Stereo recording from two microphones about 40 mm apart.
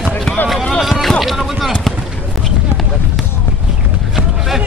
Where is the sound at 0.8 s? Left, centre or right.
Centre.